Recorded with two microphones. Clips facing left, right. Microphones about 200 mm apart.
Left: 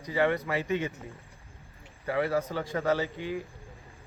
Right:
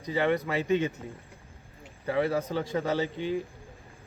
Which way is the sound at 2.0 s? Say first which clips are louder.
Right 1 dB; 20° right (ahead or behind).